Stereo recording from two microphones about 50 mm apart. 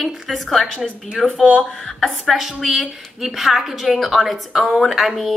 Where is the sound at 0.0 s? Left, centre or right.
Centre.